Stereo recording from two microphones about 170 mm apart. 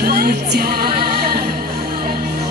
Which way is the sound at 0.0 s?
65° right (ahead or behind).